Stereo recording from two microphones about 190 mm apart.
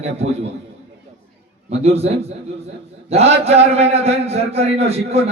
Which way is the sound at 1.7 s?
35° right (ahead or behind).